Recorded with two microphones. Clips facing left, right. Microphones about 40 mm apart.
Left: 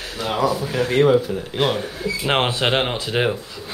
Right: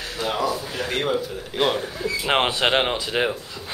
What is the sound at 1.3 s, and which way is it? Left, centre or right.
Speech, centre.